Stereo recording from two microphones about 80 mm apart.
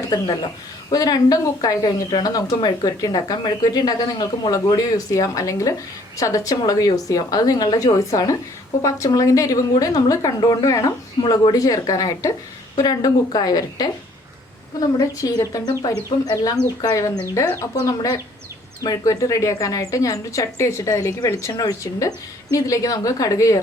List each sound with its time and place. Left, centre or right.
0.3 s speech: left
0.9 s a woman's voice: left
4.8 s speech: left
11.2 s speech: left
17.7 s a woman's voice: left
21.5 s a woman's voice: left